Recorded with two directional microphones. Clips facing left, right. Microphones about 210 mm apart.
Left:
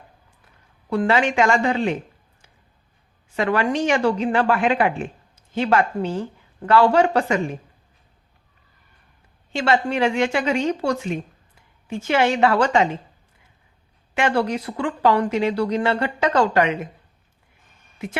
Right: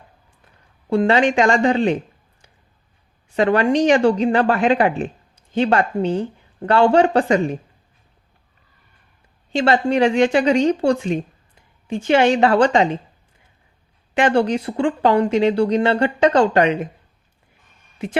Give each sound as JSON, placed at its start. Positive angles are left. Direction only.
{"t": 0.9, "sound": "speech", "side_deg": -30}
{"t": 3.3, "sound": "speech", "side_deg": -30}
{"t": 9.5, "sound": "speech", "side_deg": -35}
{"t": 14.1, "sound": "speech", "side_deg": -30}